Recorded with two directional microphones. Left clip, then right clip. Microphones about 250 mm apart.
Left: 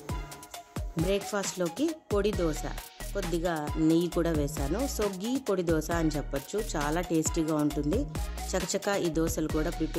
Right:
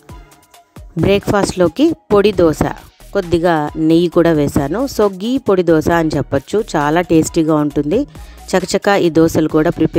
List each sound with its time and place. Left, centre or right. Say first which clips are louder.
1.0 s speech: right 17 dB; right